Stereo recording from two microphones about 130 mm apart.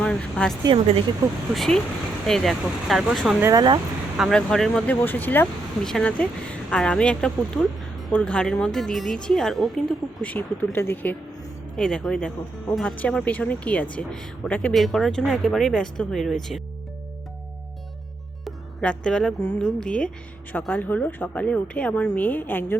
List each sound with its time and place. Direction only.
0.0 s speech: 5° left (ahead or behind)
0.7 s speech: 50° right (ahead or behind)
1.5 s speech: 5° left (ahead or behind)
3.4 s speech: 30° right (ahead or behind)
4.2 s a woman's voice: 5° left (ahead or behind)
10.2 s a woman's voice: 15° left (ahead or behind)
18.4 s a woman's voice: 5° left (ahead or behind)